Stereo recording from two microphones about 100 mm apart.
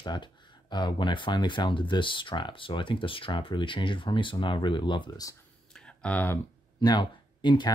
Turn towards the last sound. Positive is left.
turn(degrees=50)  # may be behind; listen again after turning